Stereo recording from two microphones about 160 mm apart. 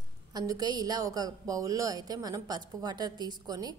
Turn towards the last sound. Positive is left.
turn(degrees=-25)  # may be behind; listen again after turning